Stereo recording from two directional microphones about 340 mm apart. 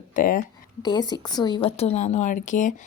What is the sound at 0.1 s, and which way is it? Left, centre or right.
Speech, left.